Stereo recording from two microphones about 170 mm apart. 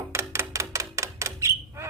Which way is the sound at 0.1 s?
15° right (ahead or behind).